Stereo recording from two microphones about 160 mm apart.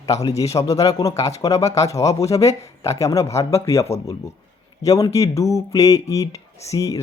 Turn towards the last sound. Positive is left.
turn(degrees=20)  # may be behind; listen again after turning